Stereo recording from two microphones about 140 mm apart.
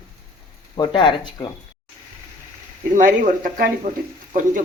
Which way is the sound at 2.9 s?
65° right (ahead or behind).